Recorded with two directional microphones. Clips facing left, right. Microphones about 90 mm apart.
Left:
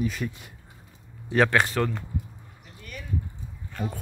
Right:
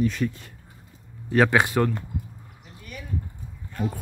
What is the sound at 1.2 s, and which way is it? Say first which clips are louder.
Speech: right 2 dB; centre (ahead or behind).